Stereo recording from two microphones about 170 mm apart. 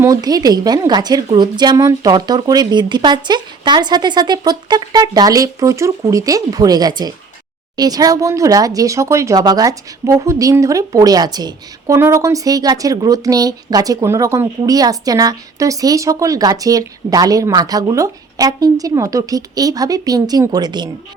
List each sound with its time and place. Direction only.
0.0 s speech: 20° right (ahead or behind)